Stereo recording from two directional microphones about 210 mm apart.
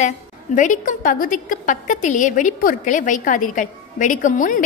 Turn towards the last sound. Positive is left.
turn(degrees=40)  # may be behind; listen again after turning